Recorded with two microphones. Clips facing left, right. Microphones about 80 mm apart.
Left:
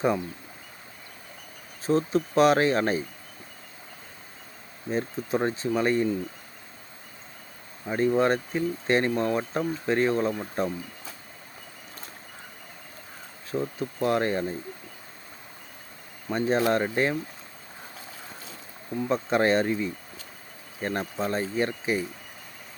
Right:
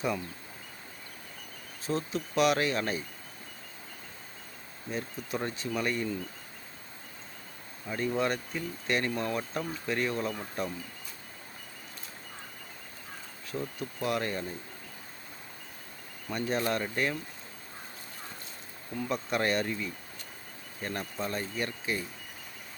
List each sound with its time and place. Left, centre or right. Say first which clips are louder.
1.9 s speech: left 8 dB; left
4.9 s speech: left 8 dB; left
7.9 s speech: left 7 dB; left
13.5 s speech: left 7 dB; left
16.3 s speech: left 7 dB; left
18.9 s speech: left 7 dB; left